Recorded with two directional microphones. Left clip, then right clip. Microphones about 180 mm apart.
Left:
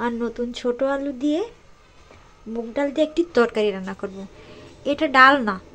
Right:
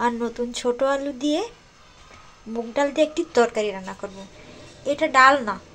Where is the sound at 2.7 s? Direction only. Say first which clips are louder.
Right 1 dB; 25° left (ahead or behind); by 5.6 s 45° left (ahead or behind).